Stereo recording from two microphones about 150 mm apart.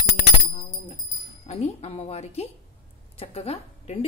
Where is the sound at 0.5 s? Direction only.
30° left (ahead or behind).